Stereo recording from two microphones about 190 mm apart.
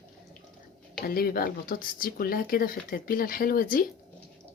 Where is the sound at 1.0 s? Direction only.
50° left (ahead or behind).